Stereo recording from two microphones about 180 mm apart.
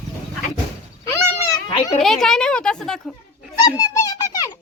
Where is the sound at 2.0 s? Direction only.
Centre (ahead or behind).